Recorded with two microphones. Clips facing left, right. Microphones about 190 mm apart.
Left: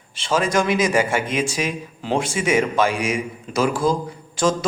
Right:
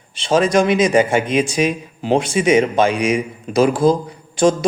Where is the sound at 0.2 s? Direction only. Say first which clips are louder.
Right 5 dB; 20° right (ahead or behind).